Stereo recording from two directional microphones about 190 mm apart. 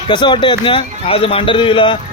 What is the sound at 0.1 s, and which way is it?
A man's voice, 25° left (ahead or behind).